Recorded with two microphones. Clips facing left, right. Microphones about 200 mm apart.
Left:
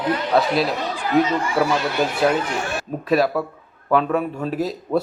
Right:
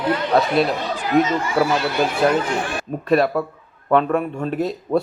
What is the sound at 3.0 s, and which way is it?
A man's voice, centre (ahead or behind).